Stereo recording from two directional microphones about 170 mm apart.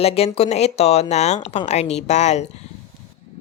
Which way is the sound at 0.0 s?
35° left (ahead or behind).